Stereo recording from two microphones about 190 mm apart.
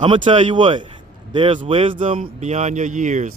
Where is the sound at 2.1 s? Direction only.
35° right (ahead or behind).